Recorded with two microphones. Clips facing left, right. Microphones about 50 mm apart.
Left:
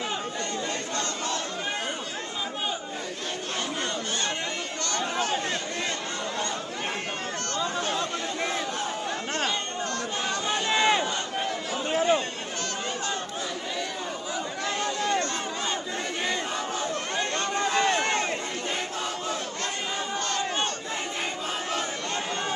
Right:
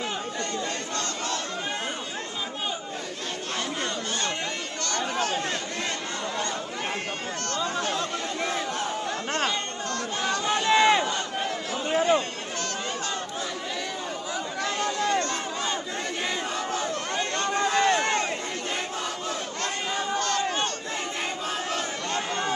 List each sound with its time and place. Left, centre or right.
0.9 s battle cry: left
5.2 s a sound: left
7.5 s chatter: left
7.9 s chatter: centre
10.7 s a sound: right
11.9 s chatter: right
14.6 s chatter: right
16.9 s chatter: left
17.4 s a sound: right
20.2 s crowd: left